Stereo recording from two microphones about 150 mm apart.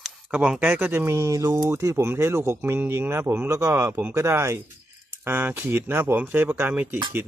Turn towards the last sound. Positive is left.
turn(degrees=-10)  # may be behind; listen again after turning